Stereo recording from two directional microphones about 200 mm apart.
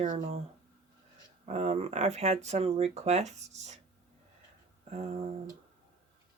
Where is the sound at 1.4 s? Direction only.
35° right (ahead or behind).